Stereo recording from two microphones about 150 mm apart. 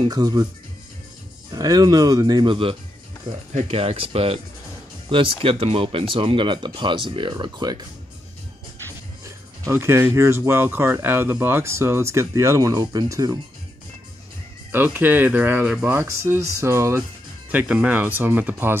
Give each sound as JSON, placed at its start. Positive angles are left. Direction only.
{"t": 0.1, "sound": "speech", "side_deg": -25}
{"t": 1.5, "sound": "speech", "side_deg": -25}
{"t": 9.2, "sound": "speech", "side_deg": -15}
{"t": 14.7, "sound": "speech", "side_deg": -15}
{"t": 16.0, "sound": "speech", "side_deg": -20}